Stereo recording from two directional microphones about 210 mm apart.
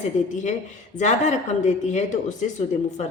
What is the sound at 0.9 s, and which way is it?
A woman's voice, 35° left (ahead or behind).